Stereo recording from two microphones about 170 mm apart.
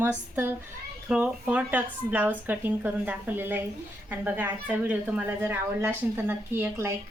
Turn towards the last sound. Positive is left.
turn(degrees=-15)  # may be behind; listen again after turning